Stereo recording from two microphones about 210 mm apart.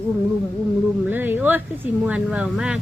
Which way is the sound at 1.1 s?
10° right (ahead or behind).